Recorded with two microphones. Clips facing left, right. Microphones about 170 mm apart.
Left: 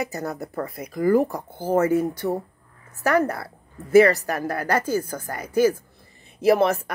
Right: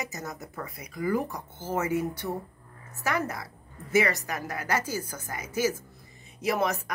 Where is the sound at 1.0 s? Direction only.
35° left (ahead or behind).